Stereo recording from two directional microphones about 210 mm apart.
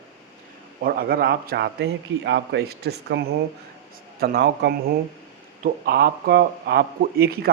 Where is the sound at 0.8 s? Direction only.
45° right (ahead or behind).